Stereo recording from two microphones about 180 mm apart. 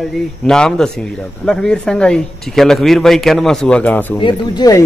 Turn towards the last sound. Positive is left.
turn(degrees=20)  # may be behind; listen again after turning